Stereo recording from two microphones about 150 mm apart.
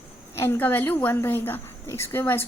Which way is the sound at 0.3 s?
15° left (ahead or behind).